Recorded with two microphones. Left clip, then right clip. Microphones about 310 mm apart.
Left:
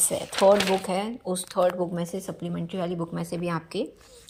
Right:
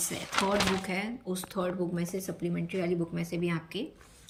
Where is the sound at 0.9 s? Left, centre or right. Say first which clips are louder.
Left 6 dB; centre.